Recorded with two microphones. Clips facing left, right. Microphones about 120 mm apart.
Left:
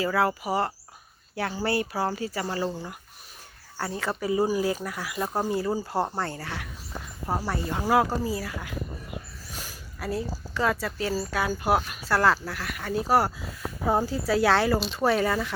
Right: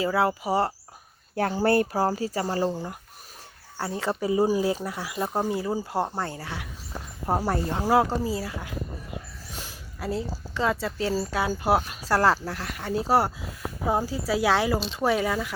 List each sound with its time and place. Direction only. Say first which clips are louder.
0.0 s speech: right 1 dB; 20° right (ahead or behind)
1.4 s speech: right 5 dB; 45° right (ahead or behind)
3.8 s speech: right 2 dB; 20° right (ahead or behind)
7.7 s speech: even; 25° right (ahead or behind)
13.8 s speech: left 1 dB; 10° right (ahead or behind)